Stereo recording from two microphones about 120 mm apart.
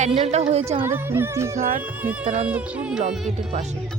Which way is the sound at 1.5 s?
80° right.